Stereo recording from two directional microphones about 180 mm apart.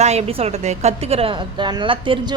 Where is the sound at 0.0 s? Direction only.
35° right (ahead or behind).